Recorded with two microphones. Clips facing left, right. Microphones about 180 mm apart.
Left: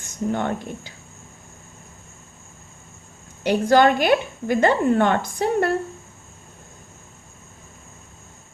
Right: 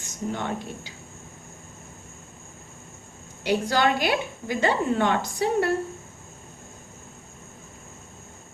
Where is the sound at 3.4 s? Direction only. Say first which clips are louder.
Left 6 dB; 50° left (ahead or behind).